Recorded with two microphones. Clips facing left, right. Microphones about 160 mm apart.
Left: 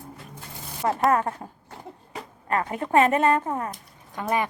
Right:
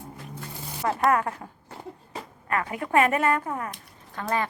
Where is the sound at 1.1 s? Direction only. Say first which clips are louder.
Left 1 dB; 25° left (ahead or behind).